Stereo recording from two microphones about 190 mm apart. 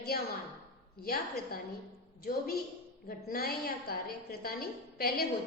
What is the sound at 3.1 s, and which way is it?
A woman's voice, 50° left (ahead or behind).